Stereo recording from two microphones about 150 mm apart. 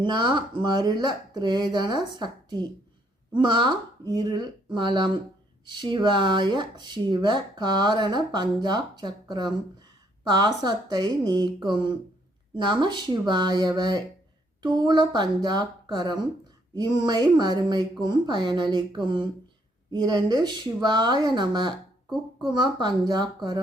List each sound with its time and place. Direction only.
0.0 s speech: 30° right (ahead or behind)